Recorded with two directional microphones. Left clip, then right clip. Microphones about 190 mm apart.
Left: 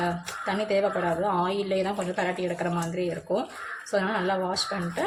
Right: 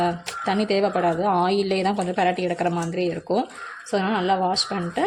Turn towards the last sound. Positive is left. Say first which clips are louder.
# right 5 dB
turn(degrees=-40)  # may be behind; listen again after turning